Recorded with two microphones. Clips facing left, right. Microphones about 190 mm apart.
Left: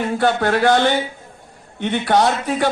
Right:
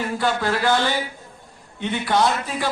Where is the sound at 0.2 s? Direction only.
60° left (ahead or behind).